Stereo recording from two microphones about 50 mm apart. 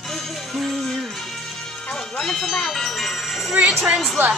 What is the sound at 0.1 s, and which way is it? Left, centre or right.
Music, centre.